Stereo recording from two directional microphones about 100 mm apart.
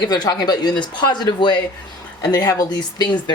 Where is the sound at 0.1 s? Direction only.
40° left (ahead or behind).